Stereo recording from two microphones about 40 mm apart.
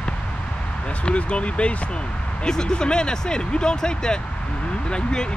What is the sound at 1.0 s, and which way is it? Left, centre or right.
Speech, left.